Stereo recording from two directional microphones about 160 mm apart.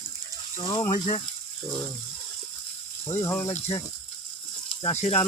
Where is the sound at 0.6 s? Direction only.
25° left (ahead or behind).